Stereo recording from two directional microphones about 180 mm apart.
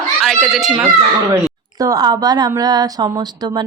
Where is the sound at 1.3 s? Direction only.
20° right (ahead or behind).